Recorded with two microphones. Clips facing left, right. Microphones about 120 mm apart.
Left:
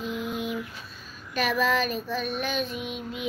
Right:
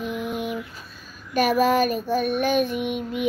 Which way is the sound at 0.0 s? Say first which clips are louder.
Right 3 dB; 55° right (ahead or behind).